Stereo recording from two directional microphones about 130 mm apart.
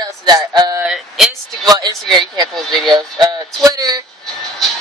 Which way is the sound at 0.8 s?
Centre (ahead or behind).